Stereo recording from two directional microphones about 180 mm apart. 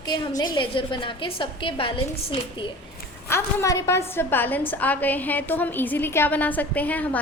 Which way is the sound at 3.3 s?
15° left (ahead or behind).